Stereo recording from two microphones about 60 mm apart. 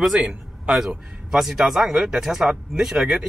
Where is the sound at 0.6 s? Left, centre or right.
Centre.